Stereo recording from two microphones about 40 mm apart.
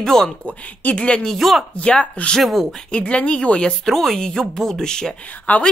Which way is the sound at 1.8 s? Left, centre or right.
Left.